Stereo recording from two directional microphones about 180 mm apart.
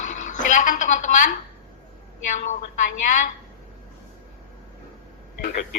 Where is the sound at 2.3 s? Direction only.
40° left (ahead or behind).